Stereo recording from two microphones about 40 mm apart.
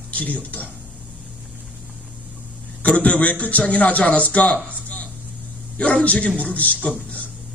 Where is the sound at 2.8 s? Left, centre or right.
Left.